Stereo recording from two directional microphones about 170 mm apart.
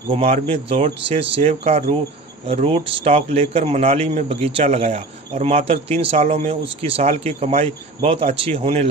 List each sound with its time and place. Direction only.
0.1 s a man's voice: 35° right (ahead or behind)